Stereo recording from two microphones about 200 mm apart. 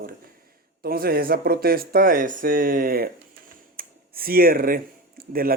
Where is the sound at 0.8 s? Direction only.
50° right (ahead or behind).